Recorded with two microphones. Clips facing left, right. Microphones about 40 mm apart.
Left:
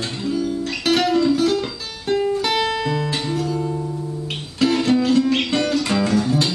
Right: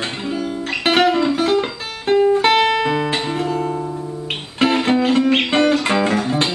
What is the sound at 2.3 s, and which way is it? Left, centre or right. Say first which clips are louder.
Guitar: right 6 dB; right.